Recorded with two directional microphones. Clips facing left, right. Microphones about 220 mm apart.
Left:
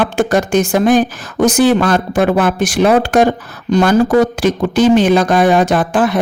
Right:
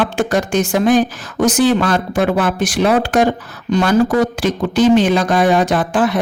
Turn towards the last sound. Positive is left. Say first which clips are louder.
# left 2 dB
turn(degrees=50)  # may be behind; listen again after turning